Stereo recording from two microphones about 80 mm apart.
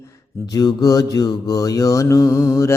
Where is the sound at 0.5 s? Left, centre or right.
Left.